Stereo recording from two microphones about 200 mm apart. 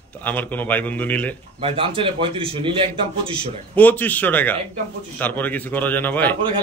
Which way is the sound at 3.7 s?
10° left (ahead or behind).